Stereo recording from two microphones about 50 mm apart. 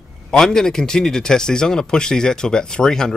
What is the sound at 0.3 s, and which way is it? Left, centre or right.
Speech, centre.